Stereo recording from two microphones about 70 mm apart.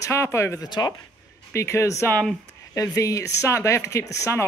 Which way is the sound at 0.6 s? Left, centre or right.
Left.